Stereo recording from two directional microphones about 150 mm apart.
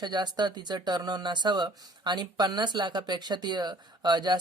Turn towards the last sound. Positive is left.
turn(degrees=-30)  # may be behind; listen again after turning